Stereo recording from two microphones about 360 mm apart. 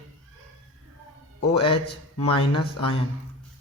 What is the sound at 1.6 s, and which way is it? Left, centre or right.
Speech, centre.